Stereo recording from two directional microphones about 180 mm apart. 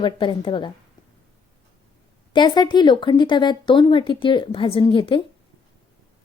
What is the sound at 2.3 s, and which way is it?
Speech, 25° left (ahead or behind).